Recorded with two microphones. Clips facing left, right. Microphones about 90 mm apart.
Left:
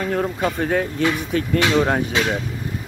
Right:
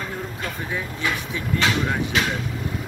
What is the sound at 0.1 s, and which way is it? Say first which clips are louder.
Speech: left 9 dB; 65° left (ahead or behind).